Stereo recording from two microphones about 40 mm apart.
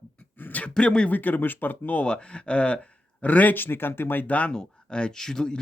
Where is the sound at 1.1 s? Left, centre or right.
Left.